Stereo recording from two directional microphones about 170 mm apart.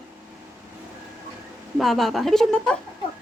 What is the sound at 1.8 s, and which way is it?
Speech, centre (ahead or behind).